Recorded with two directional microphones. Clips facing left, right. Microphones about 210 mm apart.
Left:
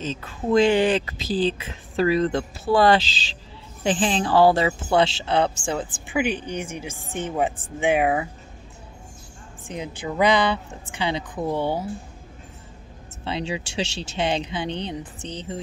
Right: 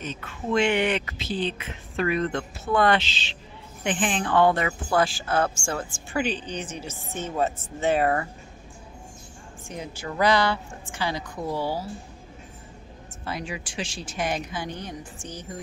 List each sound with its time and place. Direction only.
0.2 s a woman's voice: 35° left (ahead or behind); by 8.3 s 15° left (ahead or behind)
9.7 s a woman's voice: 15° left (ahead or behind)
13.2 s a woman's voice: 25° left (ahead or behind)